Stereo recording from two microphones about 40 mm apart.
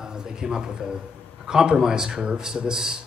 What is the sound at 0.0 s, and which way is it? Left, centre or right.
A man's voice, centre.